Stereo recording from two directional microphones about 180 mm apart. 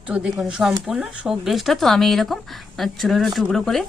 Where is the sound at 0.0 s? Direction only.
5° right (ahead or behind).